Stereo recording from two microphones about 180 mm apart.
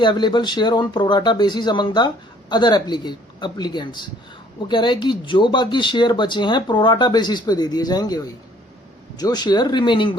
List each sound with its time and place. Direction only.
0.0 s speech: 25° left (ahead or behind)